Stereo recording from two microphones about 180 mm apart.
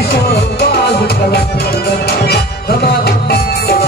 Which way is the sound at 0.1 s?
65° left (ahead or behind).